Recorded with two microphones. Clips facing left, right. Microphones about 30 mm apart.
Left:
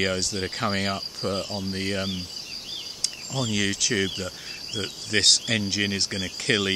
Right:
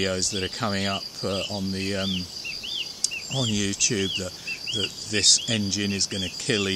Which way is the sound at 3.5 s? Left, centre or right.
Left.